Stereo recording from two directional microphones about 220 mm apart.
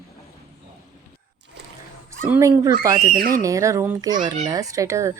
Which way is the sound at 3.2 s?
40° right (ahead or behind).